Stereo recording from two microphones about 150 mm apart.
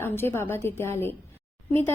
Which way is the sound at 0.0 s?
15° left (ahead or behind).